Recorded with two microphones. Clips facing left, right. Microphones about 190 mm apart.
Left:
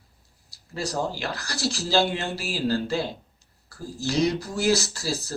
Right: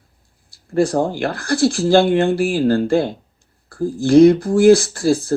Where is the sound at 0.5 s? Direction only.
55° right (ahead or behind).